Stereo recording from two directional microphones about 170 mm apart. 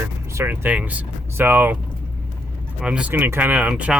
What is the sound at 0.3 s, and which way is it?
Speech, 10° right (ahead or behind).